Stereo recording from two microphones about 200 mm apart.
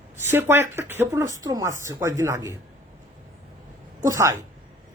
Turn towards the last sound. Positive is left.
turn(degrees=-15)  # may be behind; listen again after turning